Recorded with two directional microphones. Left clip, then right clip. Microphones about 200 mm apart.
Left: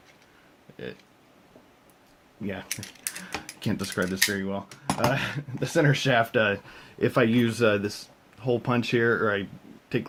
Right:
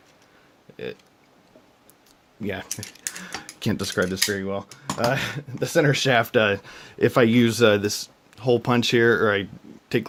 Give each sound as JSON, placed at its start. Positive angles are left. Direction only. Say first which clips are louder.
{"t": 0.7, "sound": "a sound", "louder": "right 5 dB", "side_deg": -40}
{"t": 2.4, "sound": "speech", "louder": "right 5 dB", "side_deg": -50}
{"t": 3.2, "sound": "cutlery", "louder": "right 2 dB", "side_deg": -50}
{"t": 10.0, "sound": "speech", "louder": "right 5 dB", "side_deg": -55}